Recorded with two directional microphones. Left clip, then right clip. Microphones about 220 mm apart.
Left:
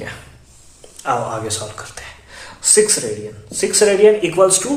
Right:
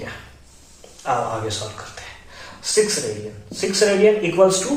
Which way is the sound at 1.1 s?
55° left (ahead or behind).